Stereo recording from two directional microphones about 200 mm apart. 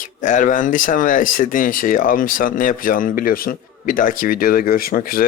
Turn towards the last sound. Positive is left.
turn(degrees=45)  # may be behind; listen again after turning